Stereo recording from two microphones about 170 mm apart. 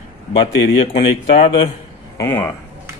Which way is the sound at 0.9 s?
35° left (ahead or behind).